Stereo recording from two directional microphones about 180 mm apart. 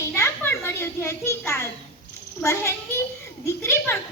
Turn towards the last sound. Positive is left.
turn(degrees=15)  # may be behind; listen again after turning